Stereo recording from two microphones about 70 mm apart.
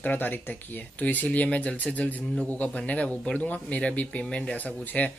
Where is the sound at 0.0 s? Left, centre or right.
Left.